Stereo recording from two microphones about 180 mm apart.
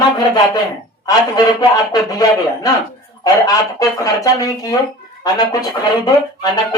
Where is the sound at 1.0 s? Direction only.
20° left (ahead or behind).